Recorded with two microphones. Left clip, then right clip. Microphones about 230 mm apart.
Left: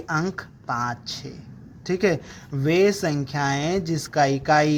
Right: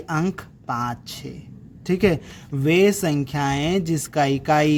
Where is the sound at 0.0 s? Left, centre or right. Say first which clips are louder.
Even; right.